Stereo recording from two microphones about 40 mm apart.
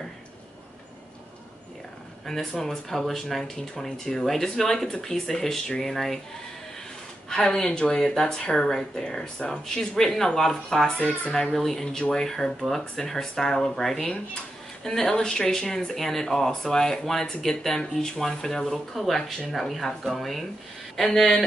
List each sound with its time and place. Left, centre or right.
2.2 s speech: centre
4.2 s speech: centre
7.2 s speech: centre
7.6 s speech: left; by 10.9 s centre
11.0 s speech: left
11.5 s speech: centre
12.9 s speech: centre
13.8 s speech: centre